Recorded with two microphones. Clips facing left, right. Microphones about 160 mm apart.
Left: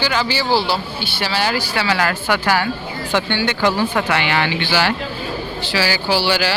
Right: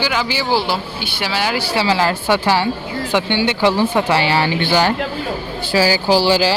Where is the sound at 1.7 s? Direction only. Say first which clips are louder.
Right 3 dB; 30° right (ahead or behind).